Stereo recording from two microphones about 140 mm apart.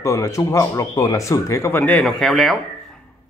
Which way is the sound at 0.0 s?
20° left (ahead or behind).